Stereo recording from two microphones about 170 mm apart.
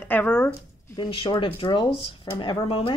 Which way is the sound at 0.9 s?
30° left (ahead or behind).